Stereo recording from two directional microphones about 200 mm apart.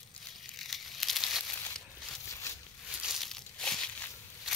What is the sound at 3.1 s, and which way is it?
Crushing, centre (ahead or behind).